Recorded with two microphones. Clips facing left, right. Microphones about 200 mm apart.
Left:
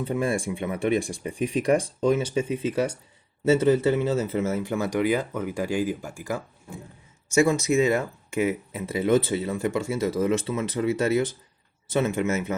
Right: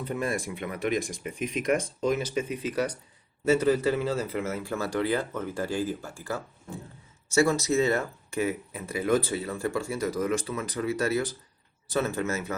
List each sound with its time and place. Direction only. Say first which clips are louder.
0.0 s speech: left 4 dB; 30° left (ahead or behind)